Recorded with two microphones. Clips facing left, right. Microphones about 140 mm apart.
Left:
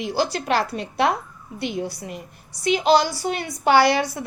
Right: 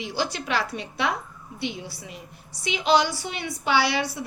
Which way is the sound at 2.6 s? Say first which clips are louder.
Left 4 dB; 40° left (ahead or behind).